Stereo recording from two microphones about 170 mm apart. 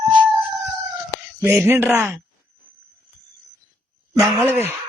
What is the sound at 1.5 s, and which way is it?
Speech, 15° right (ahead or behind).